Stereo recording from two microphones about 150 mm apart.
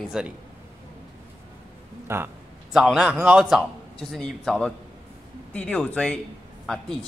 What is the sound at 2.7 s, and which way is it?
A man's voice, 5° right (ahead or behind).